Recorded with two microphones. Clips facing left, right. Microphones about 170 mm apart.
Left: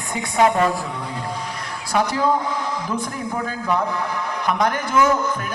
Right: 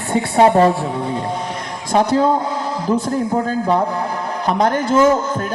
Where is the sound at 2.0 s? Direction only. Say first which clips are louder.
Right 5 dB; 25° right (ahead or behind).